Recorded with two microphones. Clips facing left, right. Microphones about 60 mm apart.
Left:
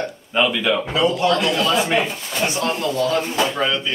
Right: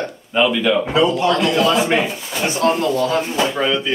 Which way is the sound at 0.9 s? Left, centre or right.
Right.